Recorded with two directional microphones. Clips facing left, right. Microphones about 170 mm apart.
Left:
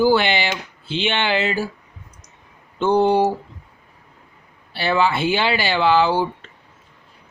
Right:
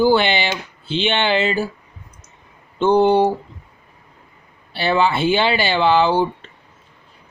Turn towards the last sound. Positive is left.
turn(degrees=-25)  # may be behind; listen again after turning